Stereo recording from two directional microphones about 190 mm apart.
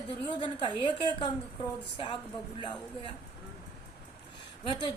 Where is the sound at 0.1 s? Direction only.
25° left (ahead or behind).